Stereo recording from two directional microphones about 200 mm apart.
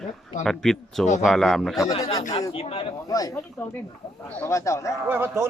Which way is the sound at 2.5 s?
30° left (ahead or behind).